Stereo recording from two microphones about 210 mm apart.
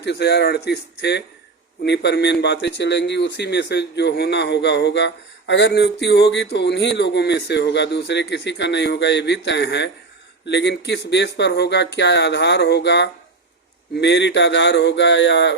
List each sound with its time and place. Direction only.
0.0 s a man's voice: 55° left (ahead or behind)